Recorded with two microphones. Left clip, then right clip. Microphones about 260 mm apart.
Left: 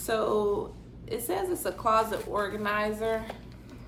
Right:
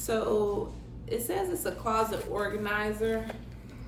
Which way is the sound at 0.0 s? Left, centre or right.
Centre.